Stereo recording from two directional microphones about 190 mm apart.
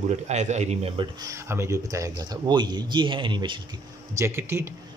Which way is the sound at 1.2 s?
15° right (ahead or behind).